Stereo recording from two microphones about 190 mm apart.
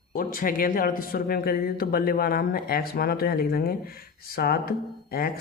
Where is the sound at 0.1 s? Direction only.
50° left (ahead or behind).